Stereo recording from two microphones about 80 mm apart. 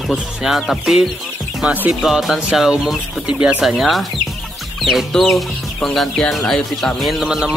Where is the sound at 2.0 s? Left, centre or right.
Centre.